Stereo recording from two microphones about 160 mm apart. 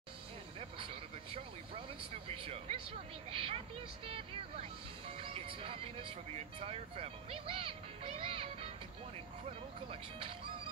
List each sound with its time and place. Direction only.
0.6 s a sound: 35° right (ahead or behind)
2.2 s speech: 35° right (ahead or behind)
9.8 s speech: 35° right (ahead or behind)